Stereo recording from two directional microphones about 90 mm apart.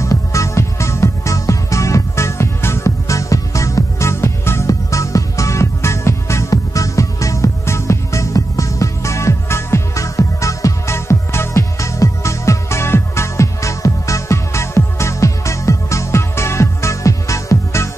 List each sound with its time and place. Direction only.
0.0 s music: 35° left (ahead or behind)